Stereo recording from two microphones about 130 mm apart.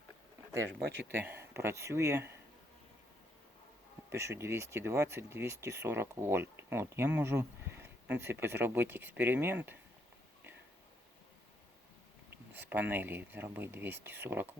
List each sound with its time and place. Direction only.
0.7 s speech: 15° right (ahead or behind)
4.1 s speech: 20° right (ahead or behind)
12.5 s speech: 15° right (ahead or behind)